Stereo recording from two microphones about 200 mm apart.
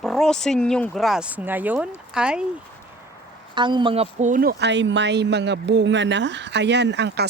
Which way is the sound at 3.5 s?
25° right (ahead or behind).